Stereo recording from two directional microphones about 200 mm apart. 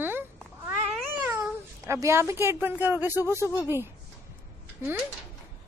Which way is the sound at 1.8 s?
15° right (ahead or behind).